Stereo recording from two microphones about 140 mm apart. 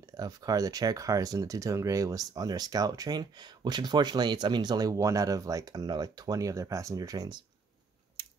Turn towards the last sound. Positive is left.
turn(degrees=-25)  # may be behind; listen again after turning